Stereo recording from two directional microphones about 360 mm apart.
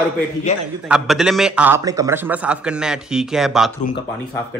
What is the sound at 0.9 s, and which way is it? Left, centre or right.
Speech, centre.